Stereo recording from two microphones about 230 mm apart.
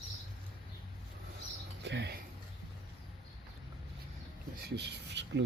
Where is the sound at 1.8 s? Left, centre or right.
Right.